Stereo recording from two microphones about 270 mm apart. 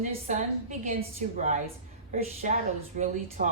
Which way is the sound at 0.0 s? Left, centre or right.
Right.